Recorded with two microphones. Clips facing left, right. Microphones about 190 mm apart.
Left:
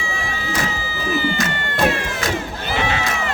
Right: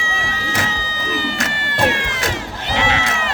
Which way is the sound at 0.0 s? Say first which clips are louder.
Right 1 dB; 90° right.